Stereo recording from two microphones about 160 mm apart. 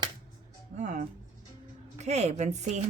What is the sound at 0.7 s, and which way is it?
A woman's voice, 50° right (ahead or behind).